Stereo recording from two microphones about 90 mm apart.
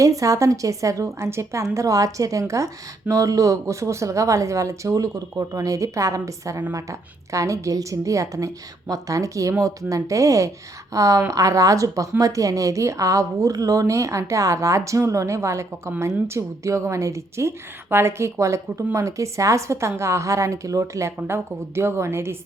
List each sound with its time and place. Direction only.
0.0 s a woman's voice: 40° right (ahead or behind)